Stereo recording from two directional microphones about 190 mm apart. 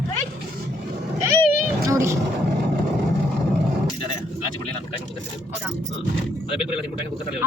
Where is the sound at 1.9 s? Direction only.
15° right (ahead or behind).